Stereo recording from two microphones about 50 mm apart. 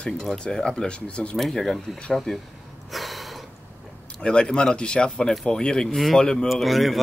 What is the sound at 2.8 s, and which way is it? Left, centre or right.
Gasp, centre.